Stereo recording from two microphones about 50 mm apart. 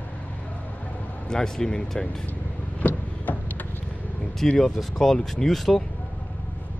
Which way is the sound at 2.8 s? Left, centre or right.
Left.